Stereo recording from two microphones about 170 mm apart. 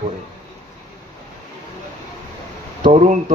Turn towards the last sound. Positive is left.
turn(degrees=-45)  # may be behind; listen again after turning